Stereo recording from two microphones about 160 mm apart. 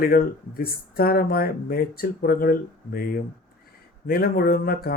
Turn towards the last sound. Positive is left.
turn(degrees=70)  # may be behind; listen again after turning